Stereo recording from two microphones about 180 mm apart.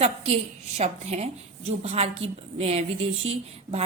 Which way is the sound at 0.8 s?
35° right (ahead or behind).